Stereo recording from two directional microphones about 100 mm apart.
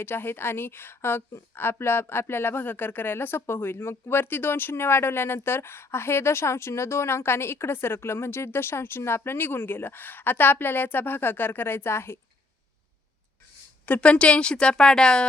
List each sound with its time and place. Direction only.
0.0 s speech: 20° left (ahead or behind)
13.8 s a woman's voice: 15° left (ahead or behind)